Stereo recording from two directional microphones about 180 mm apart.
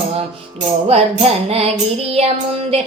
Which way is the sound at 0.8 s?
35° right (ahead or behind).